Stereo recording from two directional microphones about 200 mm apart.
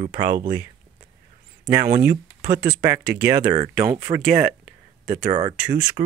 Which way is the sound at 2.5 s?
20° right (ahead or behind).